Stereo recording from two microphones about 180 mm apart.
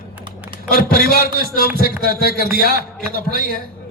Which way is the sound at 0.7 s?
55° left (ahead or behind).